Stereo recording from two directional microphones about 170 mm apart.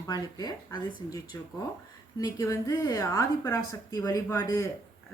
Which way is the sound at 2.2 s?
20° left (ahead or behind).